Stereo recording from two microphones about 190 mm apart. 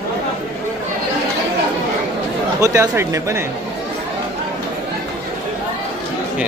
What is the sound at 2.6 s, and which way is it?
Speech, 15° right (ahead or behind).